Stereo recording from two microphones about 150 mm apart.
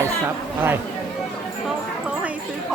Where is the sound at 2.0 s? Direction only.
10° right (ahead or behind).